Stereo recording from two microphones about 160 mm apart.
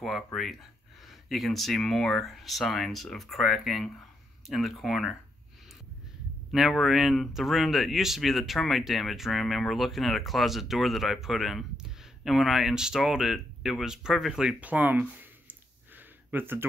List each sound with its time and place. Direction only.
0.0 s speech: centre (ahead or behind)
6.5 s speech: centre (ahead or behind)